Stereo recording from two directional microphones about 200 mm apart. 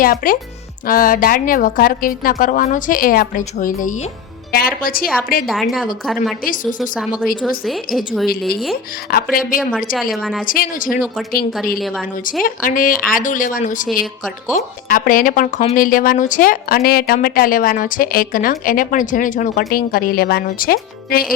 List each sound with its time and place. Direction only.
0.0 s speech: 45° left (ahead or behind)
5.5 s a woman's voice: centre (ahead or behind)
6.4 s speech: 45° left (ahead or behind)
6.7 s a woman's voice: centre (ahead or behind)
9.0 s speech: 45° left (ahead or behind)
9.6 s a woman's voice: centre (ahead or behind)
10.4 s speech: 45° left (ahead or behind)
12.4 s speech: 45° left (ahead or behind)